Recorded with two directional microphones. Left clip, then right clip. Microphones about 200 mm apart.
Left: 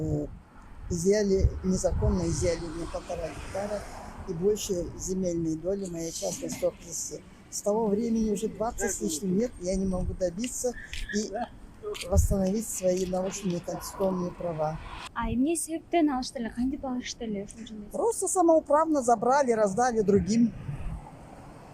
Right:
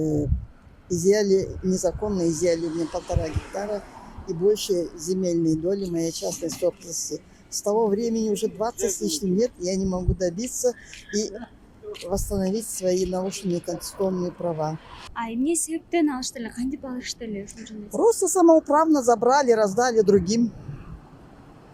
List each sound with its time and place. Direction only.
0.0 s speech: 45° right (ahead or behind)
2.6 s speech: 20° left (ahead or behind)
4.3 s speech: 45° right (ahead or behind)
12.0 s speech: 45° right (ahead or behind)
15.1 s a woman's voice: centre (ahead or behind)
17.9 s speech: 45° right (ahead or behind)